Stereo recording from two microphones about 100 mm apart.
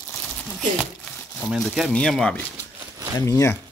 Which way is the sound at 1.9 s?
5° left (ahead or behind).